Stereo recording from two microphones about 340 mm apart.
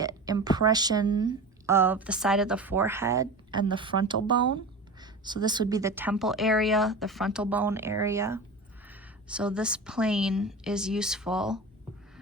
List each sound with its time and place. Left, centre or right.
0.0 s a woman's voice: centre